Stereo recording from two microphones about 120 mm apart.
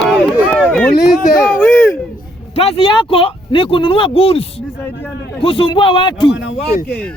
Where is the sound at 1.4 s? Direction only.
10° left (ahead or behind).